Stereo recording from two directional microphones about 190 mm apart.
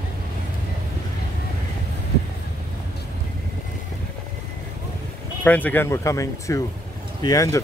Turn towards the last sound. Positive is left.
turn(degrees=20)  # may be behind; listen again after turning